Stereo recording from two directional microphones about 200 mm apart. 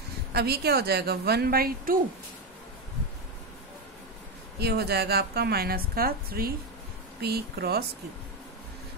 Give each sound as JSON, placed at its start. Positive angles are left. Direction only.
{"t": 0.3, "sound": "a woman's voice", "side_deg": -55}
{"t": 4.6, "sound": "a woman's voice", "side_deg": -55}